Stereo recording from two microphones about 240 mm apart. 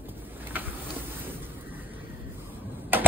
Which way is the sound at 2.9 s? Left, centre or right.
Centre.